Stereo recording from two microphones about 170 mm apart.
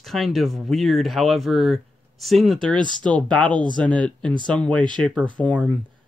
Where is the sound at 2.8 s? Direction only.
25° right (ahead or behind).